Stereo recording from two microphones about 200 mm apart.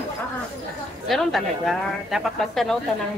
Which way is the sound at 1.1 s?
Centre (ahead or behind).